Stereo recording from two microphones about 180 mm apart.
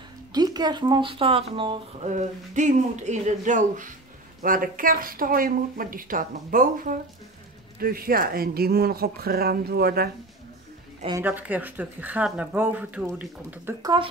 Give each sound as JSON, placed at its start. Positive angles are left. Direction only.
{"t": 0.3, "sound": "speech", "side_deg": -20}
{"t": 2.0, "sound": "speech", "side_deg": -40}
{"t": 11.1, "sound": "speech", "side_deg": -15}